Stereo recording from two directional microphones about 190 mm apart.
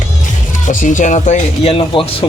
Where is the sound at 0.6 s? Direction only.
40° left (ahead or behind).